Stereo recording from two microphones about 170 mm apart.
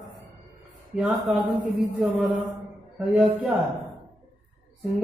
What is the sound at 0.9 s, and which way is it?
A man's voice, centre (ahead or behind).